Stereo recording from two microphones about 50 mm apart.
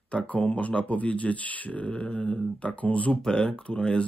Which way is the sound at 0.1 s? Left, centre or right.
Left.